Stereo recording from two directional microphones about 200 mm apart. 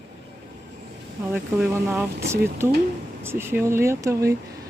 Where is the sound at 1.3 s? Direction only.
10° right (ahead or behind).